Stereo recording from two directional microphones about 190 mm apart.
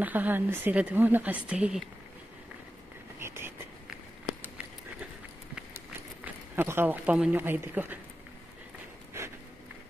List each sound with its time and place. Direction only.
0.0 s speech: 10° right (ahead or behind)
3.2 s train: 10° right (ahead or behind)
6.2 s a man's voice: 10° right (ahead or behind)